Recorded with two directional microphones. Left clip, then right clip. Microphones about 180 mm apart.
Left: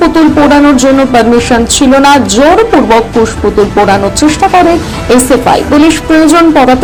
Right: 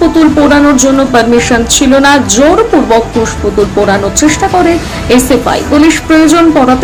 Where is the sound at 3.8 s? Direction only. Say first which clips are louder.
Left 1 dB; 10° left (ahead or behind).